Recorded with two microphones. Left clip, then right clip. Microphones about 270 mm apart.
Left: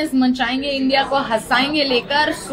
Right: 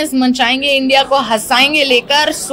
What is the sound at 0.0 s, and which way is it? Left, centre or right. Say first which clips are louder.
A woman's voice: right 5 dB; right.